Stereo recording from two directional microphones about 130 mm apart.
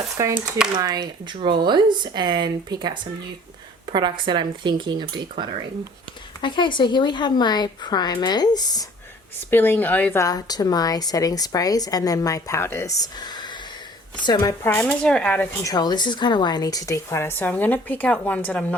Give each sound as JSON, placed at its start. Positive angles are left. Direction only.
{"t": 0.7, "sound": "speech", "side_deg": -30}
{"t": 6.4, "sound": "a woman's voice", "side_deg": 35}
{"t": 9.5, "sound": "a woman's voice", "side_deg": 15}
{"t": 14.6, "sound": "speech", "side_deg": 15}
{"t": 15.6, "sound": "a woman's voice", "side_deg": 30}